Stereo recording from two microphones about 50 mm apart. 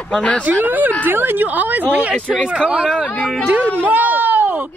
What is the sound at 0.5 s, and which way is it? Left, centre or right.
Speech, right.